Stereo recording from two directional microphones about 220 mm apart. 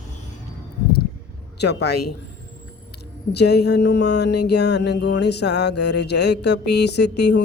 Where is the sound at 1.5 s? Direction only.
50° left (ahead or behind).